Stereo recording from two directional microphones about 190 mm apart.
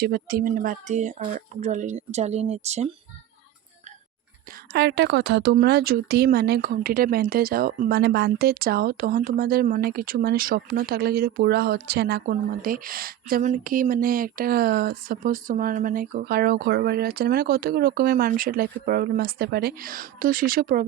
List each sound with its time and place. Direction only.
0.0 s a woman's voice: 50° right (ahead or behind); by 2.9 s 35° right (ahead or behind)
4.7 s a woman's voice: 65° right (ahead or behind); by 20.8 s 50° right (ahead or behind)